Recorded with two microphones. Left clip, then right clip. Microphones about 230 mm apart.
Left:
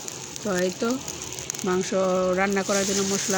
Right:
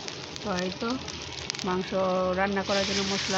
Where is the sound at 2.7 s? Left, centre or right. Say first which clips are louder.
Left 2 dB; centre.